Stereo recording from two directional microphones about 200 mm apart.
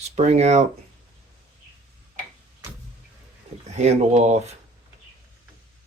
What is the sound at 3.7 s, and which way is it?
Speech, 35° right (ahead or behind).